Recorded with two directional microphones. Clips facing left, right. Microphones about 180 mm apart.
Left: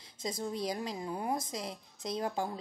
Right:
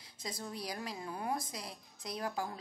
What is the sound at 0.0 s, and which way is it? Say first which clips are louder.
Speech: left 7 dB; 20° left (ahead or behind).